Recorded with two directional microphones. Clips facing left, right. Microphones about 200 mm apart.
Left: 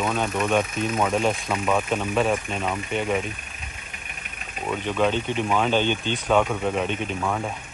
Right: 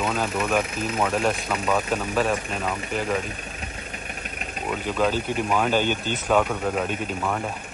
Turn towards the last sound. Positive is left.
turn(degrees=0)  # may be behind; listen again after turning